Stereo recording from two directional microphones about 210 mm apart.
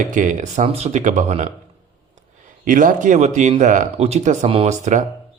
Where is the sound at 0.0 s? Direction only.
40° right (ahead or behind).